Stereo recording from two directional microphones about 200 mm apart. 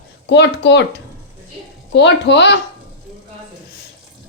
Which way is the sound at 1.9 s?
60° left (ahead or behind).